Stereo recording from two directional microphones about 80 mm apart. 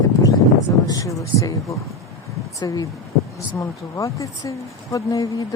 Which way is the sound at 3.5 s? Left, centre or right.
Left.